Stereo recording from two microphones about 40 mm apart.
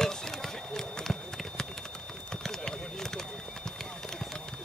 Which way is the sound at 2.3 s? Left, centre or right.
Centre.